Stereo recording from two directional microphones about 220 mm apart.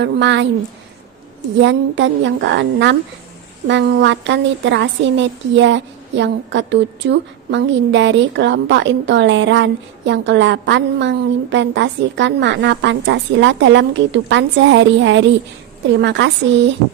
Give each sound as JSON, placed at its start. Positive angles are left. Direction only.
{"t": 0.0, "sound": "a woman's voice", "side_deg": -55}
{"t": 1.6, "sound": "a woman's voice", "side_deg": -55}